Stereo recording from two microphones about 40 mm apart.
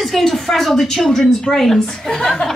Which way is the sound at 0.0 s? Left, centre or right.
Centre.